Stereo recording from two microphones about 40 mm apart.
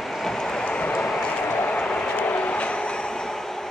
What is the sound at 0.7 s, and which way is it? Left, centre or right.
Train, left.